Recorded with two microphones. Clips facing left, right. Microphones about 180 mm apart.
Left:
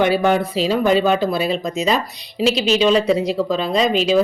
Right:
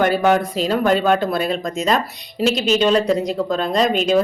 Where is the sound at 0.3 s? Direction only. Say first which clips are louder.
Left 1 dB; 45° right (ahead or behind).